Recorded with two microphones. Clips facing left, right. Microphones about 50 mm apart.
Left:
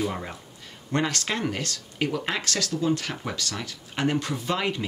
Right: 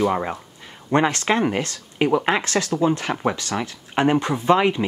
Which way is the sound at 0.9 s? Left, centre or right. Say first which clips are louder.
Right 8 dB; right.